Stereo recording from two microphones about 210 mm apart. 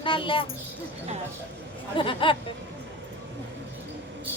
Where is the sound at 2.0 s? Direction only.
25° left (ahead or behind).